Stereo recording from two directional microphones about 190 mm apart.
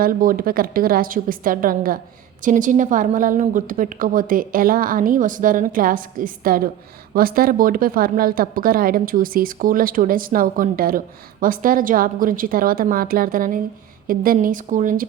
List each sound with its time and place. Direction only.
0.0 s a woman's voice: 45° right (ahead or behind)